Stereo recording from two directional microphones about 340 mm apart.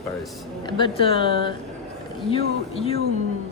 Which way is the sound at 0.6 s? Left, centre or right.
Centre.